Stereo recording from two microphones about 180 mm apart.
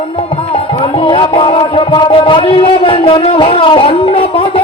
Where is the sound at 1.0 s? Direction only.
30° left (ahead or behind).